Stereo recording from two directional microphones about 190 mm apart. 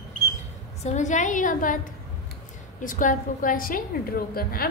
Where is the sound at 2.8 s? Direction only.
45° left (ahead or behind).